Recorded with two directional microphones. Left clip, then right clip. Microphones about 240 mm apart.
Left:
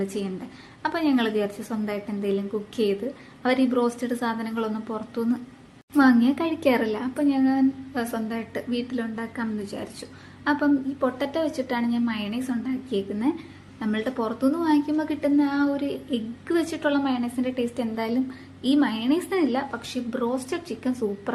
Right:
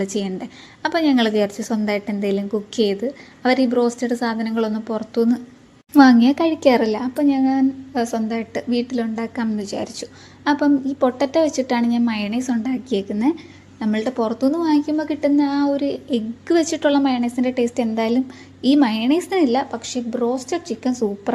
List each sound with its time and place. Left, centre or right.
0.0 s a woman's voice: right